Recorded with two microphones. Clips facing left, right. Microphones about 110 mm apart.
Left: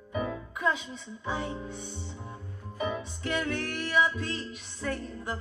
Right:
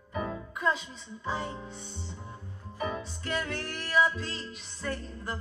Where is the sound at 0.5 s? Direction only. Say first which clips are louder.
Even; 5° left (ahead or behind).